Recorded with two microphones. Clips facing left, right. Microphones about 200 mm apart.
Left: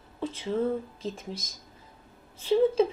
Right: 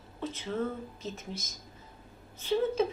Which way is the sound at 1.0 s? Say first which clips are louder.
Left 3 dB; 30° left (ahead or behind).